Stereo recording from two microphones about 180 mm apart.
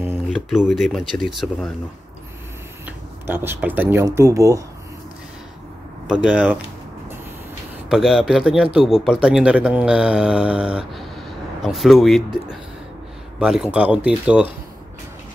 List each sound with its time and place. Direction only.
0.3 s speech: centre (ahead or behind)
3.3 s speech: 10° right (ahead or behind)
6.0 s speech: 5° right (ahead or behind)
7.9 s speech: centre (ahead or behind)
13.4 s speech: 5° right (ahead or behind)